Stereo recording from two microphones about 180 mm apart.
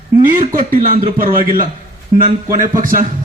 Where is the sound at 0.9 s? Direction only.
50° right (ahead or behind).